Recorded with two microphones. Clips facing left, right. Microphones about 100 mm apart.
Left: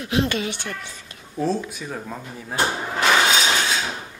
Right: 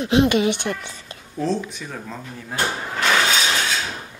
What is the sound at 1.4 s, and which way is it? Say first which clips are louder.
Speech: even; 5° left (ahead or behind).